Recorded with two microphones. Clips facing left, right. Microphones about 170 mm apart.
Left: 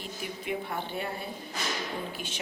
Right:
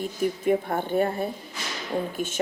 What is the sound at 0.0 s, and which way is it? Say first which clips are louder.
A woman's voice: right 12 dB; 45° right (ahead or behind).